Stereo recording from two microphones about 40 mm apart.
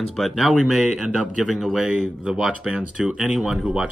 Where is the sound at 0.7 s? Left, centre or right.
Centre.